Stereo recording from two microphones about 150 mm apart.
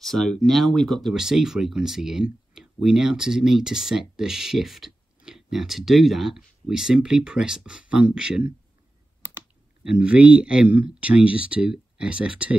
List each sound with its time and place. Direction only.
0.0 s speech: centre (ahead or behind)
9.8 s speech: 5° right (ahead or behind)